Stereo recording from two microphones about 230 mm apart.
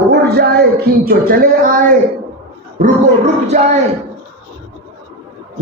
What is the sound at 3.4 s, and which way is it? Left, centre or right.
Speech, right.